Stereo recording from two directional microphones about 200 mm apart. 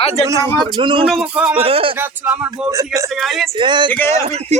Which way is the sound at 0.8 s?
25° right (ahead or behind).